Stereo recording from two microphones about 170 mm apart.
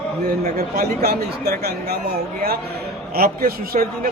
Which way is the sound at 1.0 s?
65° right (ahead or behind).